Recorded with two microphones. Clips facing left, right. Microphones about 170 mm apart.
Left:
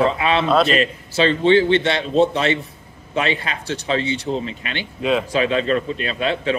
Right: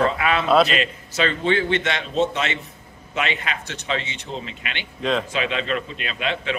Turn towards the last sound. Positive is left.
turn(degrees=35)  # may be behind; listen again after turning